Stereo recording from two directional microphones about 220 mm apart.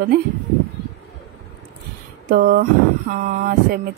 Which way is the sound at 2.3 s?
40° right (ahead or behind).